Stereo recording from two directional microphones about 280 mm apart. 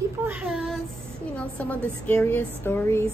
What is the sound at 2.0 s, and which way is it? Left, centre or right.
Speech, centre.